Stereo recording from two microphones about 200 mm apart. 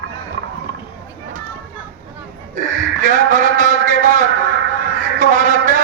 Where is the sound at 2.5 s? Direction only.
40° right (ahead or behind).